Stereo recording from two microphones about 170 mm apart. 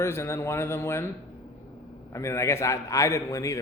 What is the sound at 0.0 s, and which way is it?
A man's voice, 15° left (ahead or behind).